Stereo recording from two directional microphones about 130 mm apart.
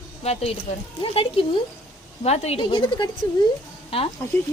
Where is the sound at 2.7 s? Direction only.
35° left (ahead or behind).